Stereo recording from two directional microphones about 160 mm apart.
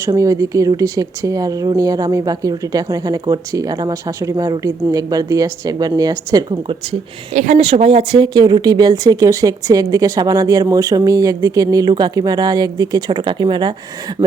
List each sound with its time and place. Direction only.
0.1 s speech: 20° right (ahead or behind)
7.3 s speech: 45° right (ahead or behind)
7.6 s speech: 35° right (ahead or behind)